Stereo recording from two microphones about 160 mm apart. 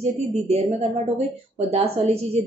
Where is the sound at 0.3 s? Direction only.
45° right (ahead or behind).